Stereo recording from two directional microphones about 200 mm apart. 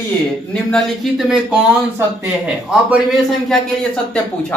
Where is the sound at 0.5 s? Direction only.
Centre (ahead or behind).